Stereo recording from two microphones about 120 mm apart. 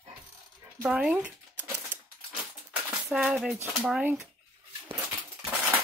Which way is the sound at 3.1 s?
10° right (ahead or behind).